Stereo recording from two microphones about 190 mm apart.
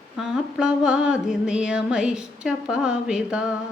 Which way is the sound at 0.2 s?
5° right (ahead or behind).